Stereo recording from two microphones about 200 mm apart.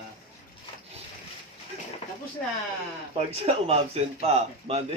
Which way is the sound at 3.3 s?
30° right (ahead or behind).